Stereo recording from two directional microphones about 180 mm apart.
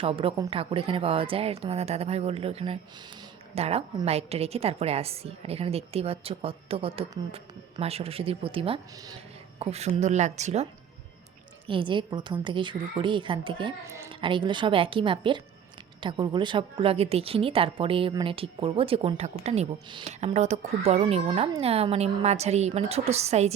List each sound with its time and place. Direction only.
0.0 s a woman's voice: 30° right (ahead or behind)